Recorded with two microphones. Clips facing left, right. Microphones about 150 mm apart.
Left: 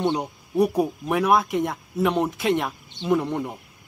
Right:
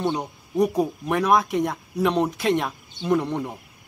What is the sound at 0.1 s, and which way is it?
Speech, 10° left (ahead or behind).